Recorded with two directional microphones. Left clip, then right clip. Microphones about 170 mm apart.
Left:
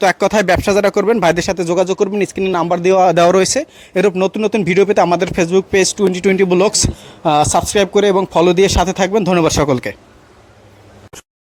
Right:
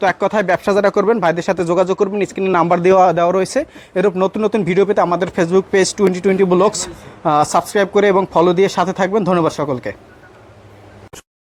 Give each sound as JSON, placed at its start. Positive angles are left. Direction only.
{"t": 0.0, "sound": "speech", "side_deg": 35}
{"t": 0.6, "sound": "speech", "side_deg": 20}
{"t": 2.1, "sound": "speech", "side_deg": 40}
{"t": 2.5, "sound": "speech", "side_deg": 5}
{"t": 3.2, "sound": "speech", "side_deg": 40}